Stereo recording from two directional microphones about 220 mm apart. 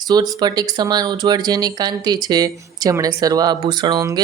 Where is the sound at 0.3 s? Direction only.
20° right (ahead or behind).